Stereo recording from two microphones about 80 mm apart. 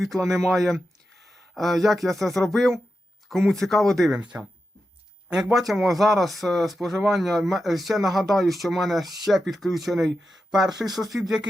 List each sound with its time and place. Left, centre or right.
0.0 s speech: centre
4.2 s speech: centre